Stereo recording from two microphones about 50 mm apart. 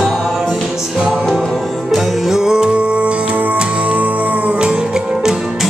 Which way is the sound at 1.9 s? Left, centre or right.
Centre.